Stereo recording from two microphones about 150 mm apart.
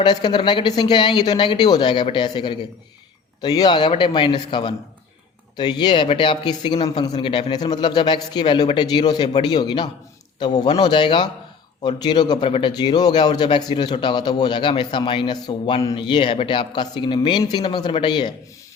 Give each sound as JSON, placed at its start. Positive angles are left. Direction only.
{"t": 0.0, "sound": "a man's voice", "side_deg": 30}